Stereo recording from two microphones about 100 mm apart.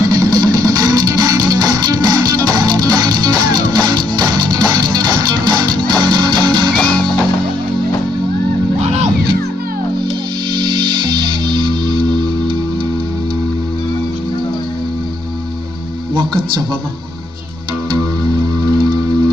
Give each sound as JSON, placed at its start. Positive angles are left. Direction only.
{"t": 0.0, "sound": "music", "side_deg": -35}
{"t": 6.7, "sound": "music", "side_deg": 10}
{"t": 10.6, "sound": "music", "side_deg": -50}
{"t": 16.2, "sound": "music", "side_deg": -50}